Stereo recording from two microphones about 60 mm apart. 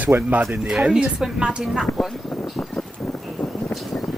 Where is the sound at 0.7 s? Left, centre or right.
Centre.